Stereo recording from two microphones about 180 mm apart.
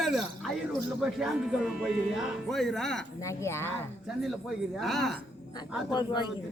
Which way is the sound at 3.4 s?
15° left (ahead or behind).